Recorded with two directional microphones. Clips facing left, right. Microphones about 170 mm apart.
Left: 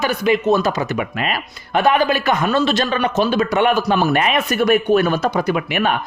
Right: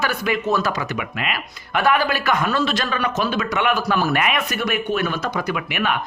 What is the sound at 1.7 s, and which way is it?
A man's voice, 20° left (ahead or behind).